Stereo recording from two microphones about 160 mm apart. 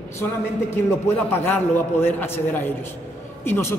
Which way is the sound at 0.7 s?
15° left (ahead or behind).